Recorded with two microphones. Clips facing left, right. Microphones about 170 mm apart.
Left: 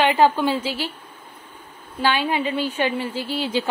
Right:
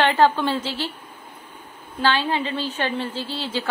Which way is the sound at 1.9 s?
10° left (ahead or behind).